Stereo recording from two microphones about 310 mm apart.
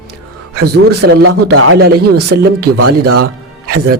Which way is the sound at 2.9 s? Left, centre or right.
Right.